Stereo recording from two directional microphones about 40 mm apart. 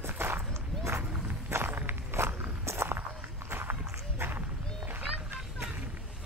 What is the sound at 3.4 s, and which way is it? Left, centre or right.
Run, right.